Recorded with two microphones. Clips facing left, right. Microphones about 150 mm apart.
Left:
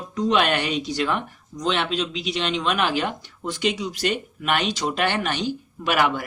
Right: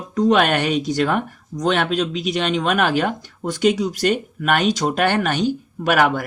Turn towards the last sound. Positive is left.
turn(degrees=-50)  # may be behind; listen again after turning